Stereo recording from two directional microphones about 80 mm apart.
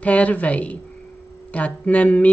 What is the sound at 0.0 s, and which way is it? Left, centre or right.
Speech, centre.